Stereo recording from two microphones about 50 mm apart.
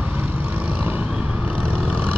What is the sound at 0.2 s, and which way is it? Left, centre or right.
Vehicle, right.